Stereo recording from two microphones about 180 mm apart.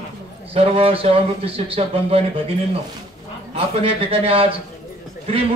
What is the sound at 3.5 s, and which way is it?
Speech, 35° right (ahead or behind).